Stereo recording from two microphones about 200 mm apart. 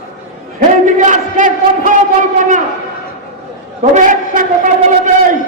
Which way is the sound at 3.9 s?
40° right (ahead or behind).